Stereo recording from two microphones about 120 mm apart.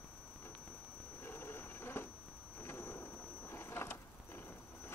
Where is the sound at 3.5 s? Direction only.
20° left (ahead or behind).